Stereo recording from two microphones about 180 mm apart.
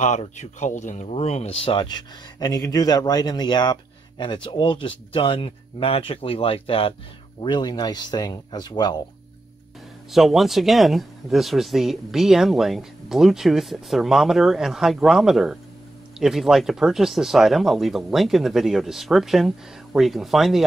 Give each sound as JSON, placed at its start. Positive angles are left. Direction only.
{"t": 0.0, "sound": "speech", "side_deg": 40}
{"t": 10.1, "sound": "speech", "side_deg": 0}